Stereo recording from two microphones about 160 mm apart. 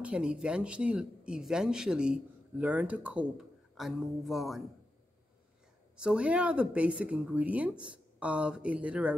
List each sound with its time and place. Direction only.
0.0 s speech: 5° right (ahead or behind)
5.9 s speech: 5° right (ahead or behind)